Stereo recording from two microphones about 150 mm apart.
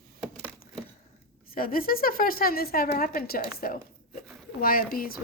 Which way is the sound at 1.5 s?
75° left (ahead or behind).